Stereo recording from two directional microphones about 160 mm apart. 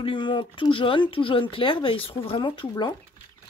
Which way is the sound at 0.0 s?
30° left (ahead or behind).